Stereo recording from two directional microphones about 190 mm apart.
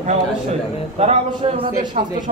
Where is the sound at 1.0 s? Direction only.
35° right (ahead or behind).